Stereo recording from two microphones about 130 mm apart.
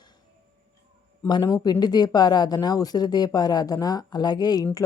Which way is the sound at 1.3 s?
25° left (ahead or behind).